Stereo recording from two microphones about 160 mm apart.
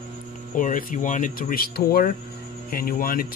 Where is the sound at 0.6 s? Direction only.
55° left (ahead or behind).